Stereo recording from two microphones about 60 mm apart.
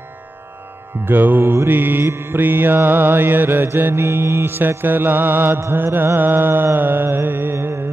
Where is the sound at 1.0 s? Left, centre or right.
Right.